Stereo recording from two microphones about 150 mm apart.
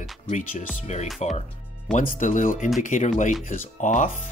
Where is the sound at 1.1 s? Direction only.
50° left (ahead or behind).